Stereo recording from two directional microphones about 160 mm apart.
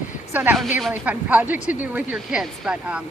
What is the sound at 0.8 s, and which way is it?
A woman's voice, 5° right (ahead or behind).